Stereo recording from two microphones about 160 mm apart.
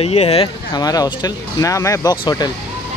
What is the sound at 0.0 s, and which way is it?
Speech, 40° left (ahead or behind).